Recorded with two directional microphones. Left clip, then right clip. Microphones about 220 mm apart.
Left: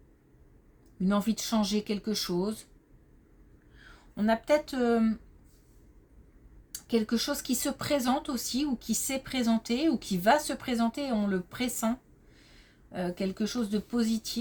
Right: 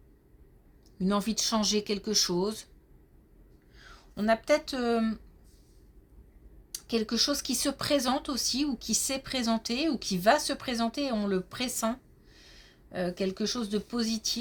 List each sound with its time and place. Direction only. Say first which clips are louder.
0.9 s speech: right 1 dB; 30° right (ahead or behind)
3.8 s speech: left 1 dB; 30° right (ahead or behind)
6.7 s speech: left 1 dB; 30° right (ahead or behind)